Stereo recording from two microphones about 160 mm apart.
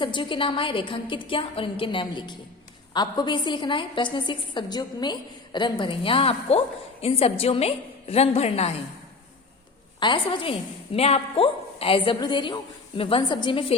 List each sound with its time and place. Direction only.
0.0 s a woman's voice: 30° left (ahead or behind)
10.0 s a woman's voice: 30° left (ahead or behind)